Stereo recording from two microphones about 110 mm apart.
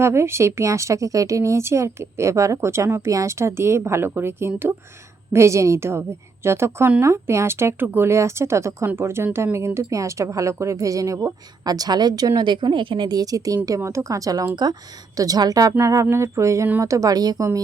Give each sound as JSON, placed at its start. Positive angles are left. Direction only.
{"t": 0.0, "sound": "speech", "side_deg": -25}